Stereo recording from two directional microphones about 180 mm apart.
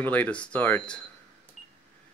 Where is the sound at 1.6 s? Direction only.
Centre (ahead or behind).